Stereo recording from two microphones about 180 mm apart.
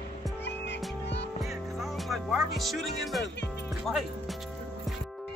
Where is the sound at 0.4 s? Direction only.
75° left (ahead or behind).